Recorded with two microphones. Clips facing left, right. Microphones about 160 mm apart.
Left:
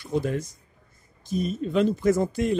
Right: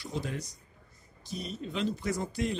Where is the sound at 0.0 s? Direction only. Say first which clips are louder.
Left 9 dB; 50° left (ahead or behind).